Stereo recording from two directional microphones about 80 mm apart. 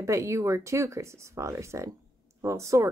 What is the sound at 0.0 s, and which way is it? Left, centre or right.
Speech, right.